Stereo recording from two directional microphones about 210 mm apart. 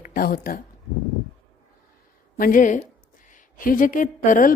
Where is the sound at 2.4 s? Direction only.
40° left (ahead or behind).